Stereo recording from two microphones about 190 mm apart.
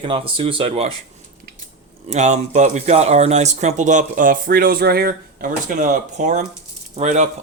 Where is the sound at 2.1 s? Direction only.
35° right (ahead or behind).